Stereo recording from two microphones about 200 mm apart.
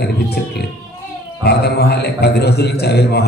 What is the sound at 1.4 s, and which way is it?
Mantra, 55° left (ahead or behind).